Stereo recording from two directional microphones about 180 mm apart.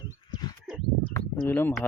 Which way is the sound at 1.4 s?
10° left (ahead or behind).